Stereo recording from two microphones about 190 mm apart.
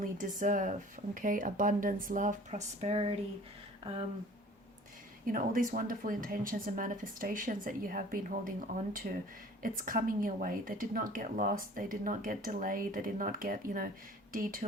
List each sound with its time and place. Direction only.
0.0 s speech: 45° right (ahead or behind)
5.2 s speech: 45° right (ahead or behind)